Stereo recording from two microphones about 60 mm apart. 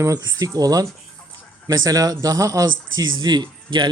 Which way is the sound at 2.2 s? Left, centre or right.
Right.